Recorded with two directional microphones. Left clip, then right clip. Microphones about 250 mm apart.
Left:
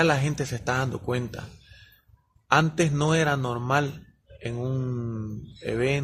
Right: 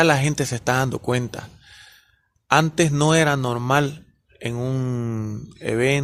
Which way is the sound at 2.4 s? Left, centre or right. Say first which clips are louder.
Right 4 dB; right.